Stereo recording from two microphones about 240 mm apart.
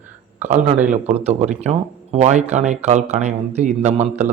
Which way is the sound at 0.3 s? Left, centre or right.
Right.